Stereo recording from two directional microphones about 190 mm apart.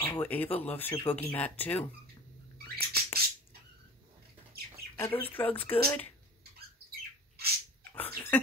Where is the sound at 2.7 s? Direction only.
55° right (ahead or behind).